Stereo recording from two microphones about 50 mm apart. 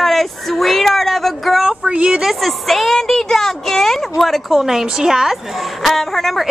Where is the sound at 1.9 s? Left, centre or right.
Right.